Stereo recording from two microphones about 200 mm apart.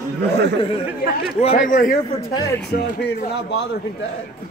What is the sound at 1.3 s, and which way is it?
Speech, 35° left (ahead or behind).